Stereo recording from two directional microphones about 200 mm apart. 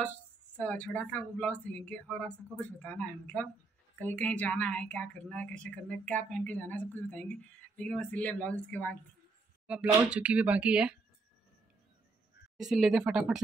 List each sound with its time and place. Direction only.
0.6 s a woman's voice: 5° left (ahead or behind)
9.7 s speech: 5° right (ahead or behind)
12.5 s speech: centre (ahead or behind)